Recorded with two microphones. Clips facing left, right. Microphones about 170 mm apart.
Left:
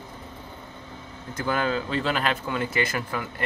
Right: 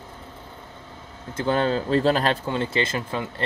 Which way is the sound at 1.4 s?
30° right (ahead or behind).